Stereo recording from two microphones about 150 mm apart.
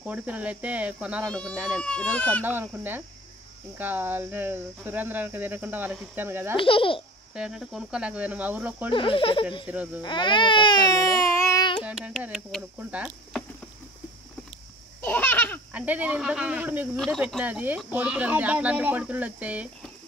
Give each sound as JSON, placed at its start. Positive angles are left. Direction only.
{"t": 0.0, "sound": "speech", "side_deg": -10}
{"t": 1.8, "sound": "speech", "side_deg": 5}
{"t": 2.4, "sound": "speech", "side_deg": -15}
{"t": 6.5, "sound": "speech", "side_deg": 35}
{"t": 7.3, "sound": "speech", "side_deg": -5}
{"t": 8.9, "sound": "speech", "side_deg": 35}
{"t": 9.7, "sound": "speech", "side_deg": -10}
{"t": 10.0, "sound": "speech", "side_deg": 30}
{"t": 11.8, "sound": "a sound", "side_deg": -10}
{"t": 12.2, "sound": "speech", "side_deg": 0}
{"t": 15.0, "sound": "babbling", "side_deg": 10}
{"t": 15.7, "sound": "speech", "side_deg": -10}
{"t": 16.9, "sound": "speech", "side_deg": 0}
{"t": 17.4, "sound": "speech", "side_deg": -10}